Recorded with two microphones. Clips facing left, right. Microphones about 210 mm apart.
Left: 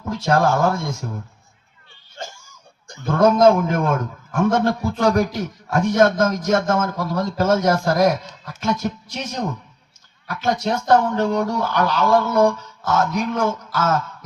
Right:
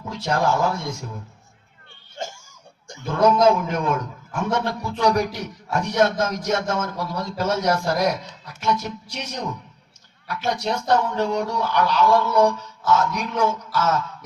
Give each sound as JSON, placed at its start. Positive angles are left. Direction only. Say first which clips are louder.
{"t": 0.1, "sound": "a man's voice", "louder": "left 4 dB", "side_deg": 50}
{"t": 3.1, "sound": "a man's voice", "louder": "left 3 dB", "side_deg": 50}